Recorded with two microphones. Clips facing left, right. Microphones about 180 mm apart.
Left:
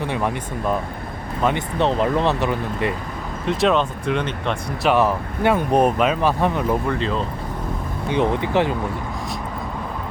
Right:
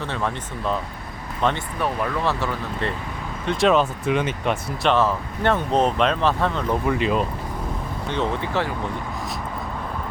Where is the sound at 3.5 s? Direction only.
Centre (ahead or behind).